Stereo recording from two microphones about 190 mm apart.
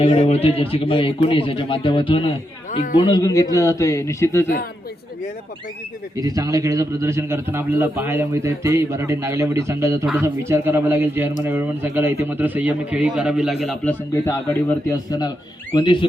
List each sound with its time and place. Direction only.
0.0 s a man's voice: 30° left (ahead or behind); by 4.4 s 15° left (ahead or behind)
6.1 s a man's voice: 20° right (ahead or behind); by 13.7 s centre (ahead or behind)
13.8 s a man's voice: 10° left (ahead or behind)